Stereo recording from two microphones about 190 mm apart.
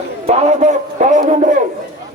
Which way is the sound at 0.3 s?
40° right (ahead or behind).